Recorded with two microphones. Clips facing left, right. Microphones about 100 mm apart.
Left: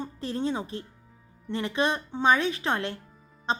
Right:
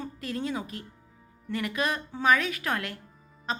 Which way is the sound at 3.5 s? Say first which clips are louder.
Left 4 dB; 30° left (ahead or behind).